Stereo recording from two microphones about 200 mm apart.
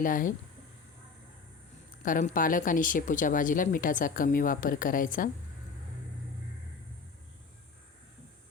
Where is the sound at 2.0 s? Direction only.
40° left (ahead or behind).